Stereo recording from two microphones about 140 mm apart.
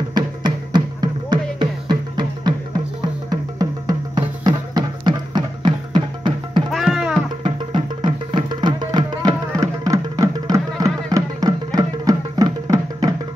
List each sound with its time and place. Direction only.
0.1 s music: 35° right (ahead or behind)
6.7 s music: centre (ahead or behind)
7.4 s music: 35° right (ahead or behind)